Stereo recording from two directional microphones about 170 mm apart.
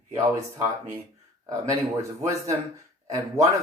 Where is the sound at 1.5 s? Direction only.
20° right (ahead or behind).